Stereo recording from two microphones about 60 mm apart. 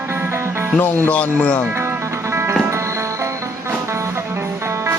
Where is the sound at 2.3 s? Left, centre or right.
Right.